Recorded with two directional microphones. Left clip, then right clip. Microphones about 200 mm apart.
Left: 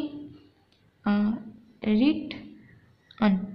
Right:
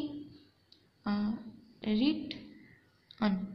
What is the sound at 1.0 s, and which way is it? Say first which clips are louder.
A woman's voice: left 8 dB; 15° left (ahead or behind).